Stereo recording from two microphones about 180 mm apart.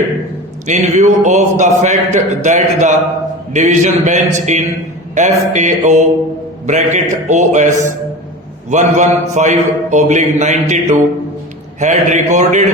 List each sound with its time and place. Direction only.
0.7 s a man's voice: 40° right (ahead or behind)